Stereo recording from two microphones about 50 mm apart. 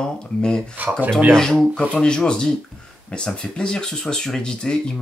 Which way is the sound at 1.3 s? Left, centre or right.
Centre.